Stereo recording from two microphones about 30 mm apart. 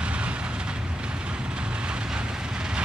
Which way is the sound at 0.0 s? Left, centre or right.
Right.